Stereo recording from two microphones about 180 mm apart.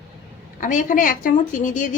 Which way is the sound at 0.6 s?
45° left (ahead or behind).